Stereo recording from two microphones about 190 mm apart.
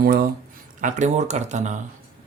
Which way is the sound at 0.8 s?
40° right (ahead or behind).